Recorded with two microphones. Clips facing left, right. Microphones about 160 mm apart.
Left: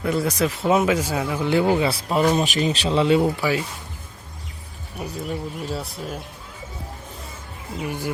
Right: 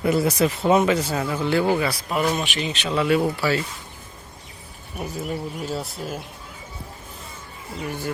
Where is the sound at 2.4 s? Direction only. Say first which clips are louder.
Left 5 dB; 40° left (ahead or behind); by 3.6 s 15° left (ahead or behind).